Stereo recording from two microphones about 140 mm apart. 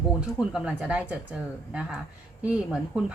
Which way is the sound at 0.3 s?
5° right (ahead or behind).